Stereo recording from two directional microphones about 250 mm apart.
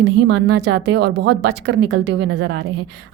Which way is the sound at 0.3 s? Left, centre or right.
Right.